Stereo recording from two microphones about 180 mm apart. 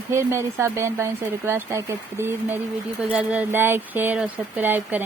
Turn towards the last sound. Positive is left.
turn(degrees=-10)  # may be behind; listen again after turning